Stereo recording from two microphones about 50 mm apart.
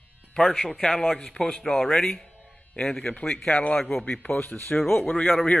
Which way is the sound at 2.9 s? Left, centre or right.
Left.